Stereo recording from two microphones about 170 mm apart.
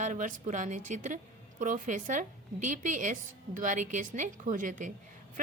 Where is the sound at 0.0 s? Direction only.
50° right (ahead or behind).